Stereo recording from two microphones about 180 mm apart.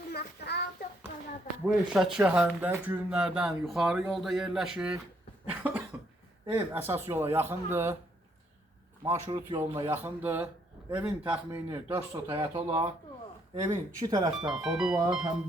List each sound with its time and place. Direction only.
0.1 s child singing: 65° left (ahead or behind)
1.9 s speech: 5° right (ahead or behind)
9.0 s speech: 15° right (ahead or behind)
12.3 s speech: 25° right (ahead or behind)
14.4 s speech: 5° right (ahead or behind)